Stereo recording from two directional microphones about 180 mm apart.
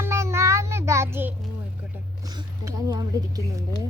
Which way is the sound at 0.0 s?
15° right (ahead or behind).